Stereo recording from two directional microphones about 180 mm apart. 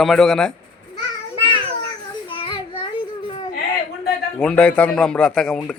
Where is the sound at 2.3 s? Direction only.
30° left (ahead or behind).